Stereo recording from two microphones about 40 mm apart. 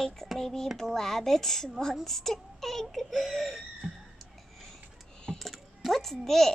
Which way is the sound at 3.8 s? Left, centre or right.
Centre.